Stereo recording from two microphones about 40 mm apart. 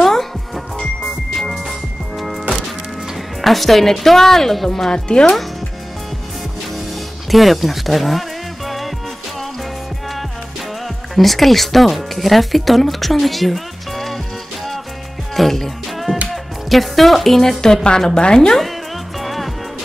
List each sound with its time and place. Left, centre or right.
0.0 s music: centre
1.4 s music: centre
3.4 s a woman's voice: centre
4.9 s speech: left
7.2 s music: centre
11.1 s speech: centre
15.3 s music: centre
16.3 s a woman's voice: centre
19.1 s music: centre